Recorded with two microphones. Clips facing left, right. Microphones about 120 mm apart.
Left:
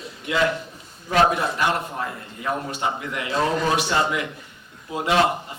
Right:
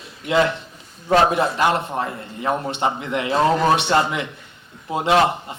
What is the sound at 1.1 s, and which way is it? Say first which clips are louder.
A man's voice: right 3 dB; 25° right (ahead or behind).